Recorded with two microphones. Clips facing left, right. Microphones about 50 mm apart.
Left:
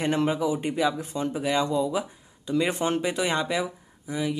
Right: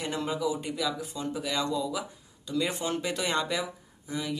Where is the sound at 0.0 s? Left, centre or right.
Left.